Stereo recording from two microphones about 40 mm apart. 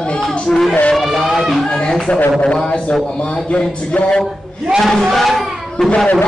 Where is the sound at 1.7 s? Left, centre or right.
Left.